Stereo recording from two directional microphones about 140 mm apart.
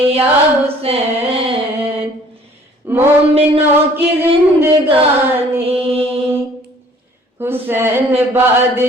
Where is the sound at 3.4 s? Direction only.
45° right (ahead or behind).